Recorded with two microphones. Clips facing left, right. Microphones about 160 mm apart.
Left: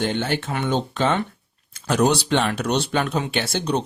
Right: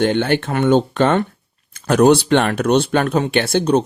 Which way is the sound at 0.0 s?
60° right (ahead or behind).